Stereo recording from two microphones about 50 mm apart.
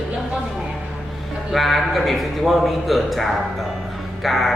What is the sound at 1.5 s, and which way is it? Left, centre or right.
A man's voice, centre.